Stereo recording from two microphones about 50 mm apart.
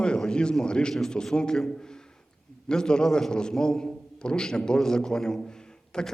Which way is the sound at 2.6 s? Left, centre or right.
Centre.